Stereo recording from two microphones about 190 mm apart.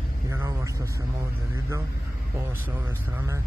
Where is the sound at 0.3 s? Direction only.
15° right (ahead or behind).